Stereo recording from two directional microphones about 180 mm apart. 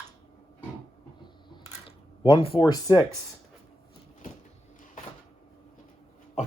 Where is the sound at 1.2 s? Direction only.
25° left (ahead or behind).